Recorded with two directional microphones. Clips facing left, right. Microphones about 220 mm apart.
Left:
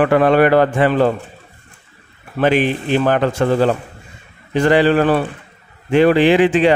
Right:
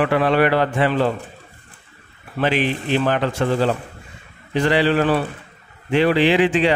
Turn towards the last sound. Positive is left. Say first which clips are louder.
# left 4 dB
turn(degrees=50)  # may be behind; listen again after turning